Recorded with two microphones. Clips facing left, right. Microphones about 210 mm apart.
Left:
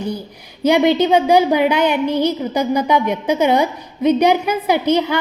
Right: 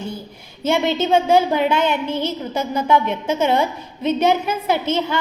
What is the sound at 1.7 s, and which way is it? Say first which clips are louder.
A woman's voice: left 4 dB; 15° left (ahead or behind).